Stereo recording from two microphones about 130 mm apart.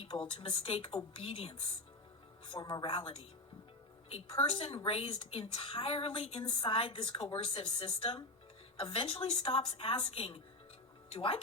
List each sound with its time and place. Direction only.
0.0 s a woman's voice: 45° left (ahead or behind)